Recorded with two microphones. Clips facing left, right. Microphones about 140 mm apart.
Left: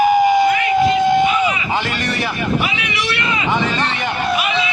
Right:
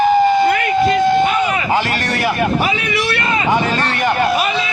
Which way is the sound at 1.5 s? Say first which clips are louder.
Right 3 dB; 50° right (ahead or behind).